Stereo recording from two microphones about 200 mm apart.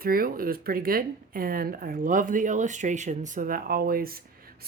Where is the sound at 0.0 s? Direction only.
45° right (ahead or behind).